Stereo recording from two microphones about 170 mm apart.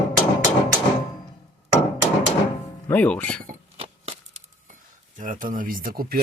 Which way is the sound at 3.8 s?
40° right (ahead or behind).